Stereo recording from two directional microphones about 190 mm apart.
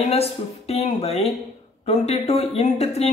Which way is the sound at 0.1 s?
35° left (ahead or behind).